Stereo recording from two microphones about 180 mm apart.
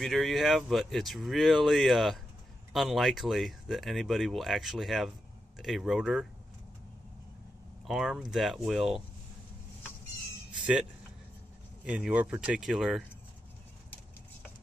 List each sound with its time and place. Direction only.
0.0 s speech: centre (ahead or behind)
7.8 s speech: centre (ahead or behind)
11.8 s speech: 5° right (ahead or behind)